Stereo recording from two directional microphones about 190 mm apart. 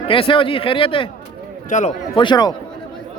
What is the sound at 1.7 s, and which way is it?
Speech, 40° left (ahead or behind).